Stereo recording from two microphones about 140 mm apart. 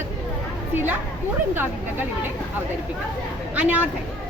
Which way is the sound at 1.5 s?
15° right (ahead or behind).